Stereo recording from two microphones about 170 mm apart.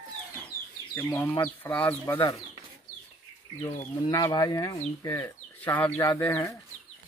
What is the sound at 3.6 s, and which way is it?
Speech, 25° left (ahead or behind).